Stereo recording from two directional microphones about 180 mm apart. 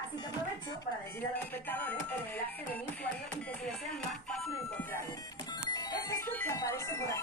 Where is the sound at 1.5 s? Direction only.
10° left (ahead or behind).